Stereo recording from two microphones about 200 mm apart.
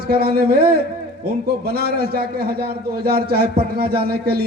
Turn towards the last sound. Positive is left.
turn(degrees=-50)  # may be behind; listen again after turning